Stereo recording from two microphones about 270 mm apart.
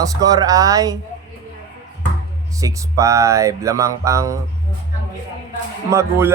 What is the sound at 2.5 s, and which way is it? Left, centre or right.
A man's voice, centre.